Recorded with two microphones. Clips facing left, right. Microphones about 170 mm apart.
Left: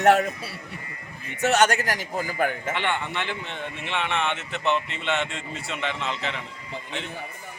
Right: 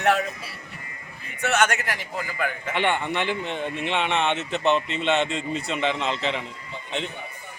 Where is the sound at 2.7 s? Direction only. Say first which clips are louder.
Right 4 dB; 15° right (ahead or behind).